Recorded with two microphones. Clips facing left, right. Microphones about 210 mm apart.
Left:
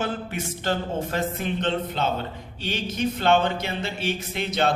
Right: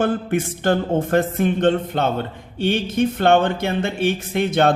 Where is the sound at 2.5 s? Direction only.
55° right (ahead or behind).